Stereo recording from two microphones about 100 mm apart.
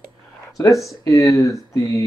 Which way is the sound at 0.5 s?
30° left (ahead or behind).